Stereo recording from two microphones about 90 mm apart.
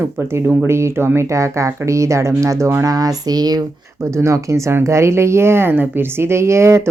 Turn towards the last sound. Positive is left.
turn(degrees=-30)  # may be behind; listen again after turning